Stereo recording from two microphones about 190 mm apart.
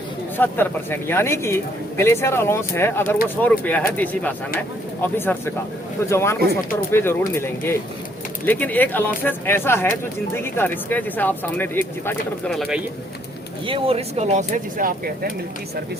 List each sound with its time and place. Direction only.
0.3 s speech: 10° left (ahead or behind)
12.5 s speech: centre (ahead or behind)
13.7 s speech: 30° right (ahead or behind); by 15.3 s 50° right (ahead or behind)